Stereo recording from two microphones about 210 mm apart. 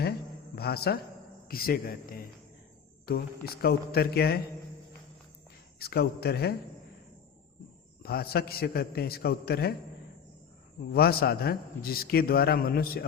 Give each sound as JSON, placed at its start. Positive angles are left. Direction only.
{"t": 0.5, "sound": "a man's voice", "side_deg": 50}
{"t": 5.8, "sound": "a man's voice", "side_deg": 50}
{"t": 8.0, "sound": "a man's voice", "side_deg": 50}
{"t": 10.9, "sound": "a man's voice", "side_deg": 45}